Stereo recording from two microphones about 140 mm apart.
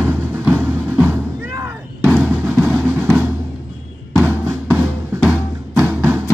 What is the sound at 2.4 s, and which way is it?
Drum, 15° right (ahead or behind).